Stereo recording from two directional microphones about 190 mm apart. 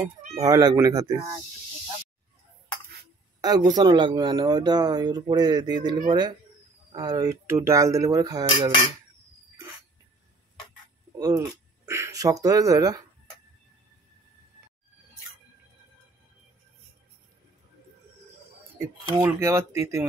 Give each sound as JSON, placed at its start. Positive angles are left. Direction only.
{"t": 0.4, "sound": "speech", "side_deg": -20}
{"t": 3.3, "sound": "speech", "side_deg": -20}
{"t": 11.1, "sound": "speech", "side_deg": -15}
{"t": 19.1, "sound": "speech", "side_deg": -15}